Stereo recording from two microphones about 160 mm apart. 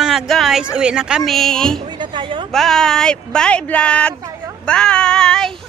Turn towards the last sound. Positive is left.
turn(degrees=5)  # may be behind; listen again after turning